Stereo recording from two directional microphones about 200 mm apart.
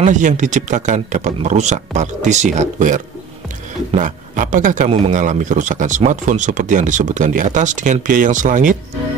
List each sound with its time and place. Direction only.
0.0 s a man's voice: 40° right (ahead or behind)